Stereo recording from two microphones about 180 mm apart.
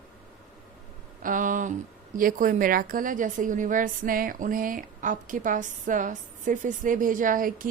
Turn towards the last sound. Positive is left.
turn(degrees=-50)  # may be behind; listen again after turning